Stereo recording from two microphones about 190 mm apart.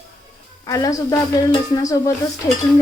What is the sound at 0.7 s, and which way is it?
A woman's voice, 20° left (ahead or behind).